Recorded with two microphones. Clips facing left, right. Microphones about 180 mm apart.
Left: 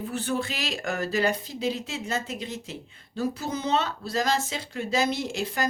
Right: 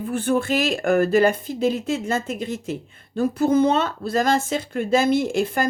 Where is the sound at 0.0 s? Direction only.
50° right (ahead or behind).